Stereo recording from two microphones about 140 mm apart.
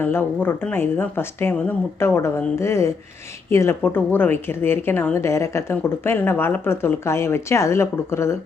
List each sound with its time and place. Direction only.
0.0 s a woman's voice: 15° left (ahead or behind)